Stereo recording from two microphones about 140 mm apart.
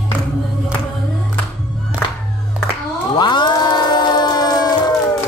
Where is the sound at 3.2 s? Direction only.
30° left (ahead or behind).